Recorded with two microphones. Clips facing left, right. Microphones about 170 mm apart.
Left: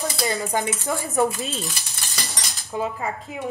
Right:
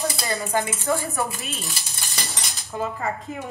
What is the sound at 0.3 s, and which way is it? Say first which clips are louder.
Speech: right 2 dB; 15° left (ahead or behind).